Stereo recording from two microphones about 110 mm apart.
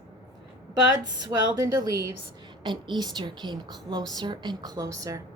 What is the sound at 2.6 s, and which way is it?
A woman's voice, 45° right (ahead or behind).